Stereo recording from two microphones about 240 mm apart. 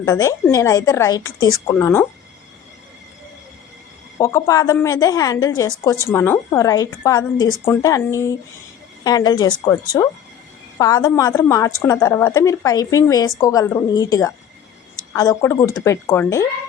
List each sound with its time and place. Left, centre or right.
0.0 s a woman's voice: centre
4.2 s a woman's voice: centre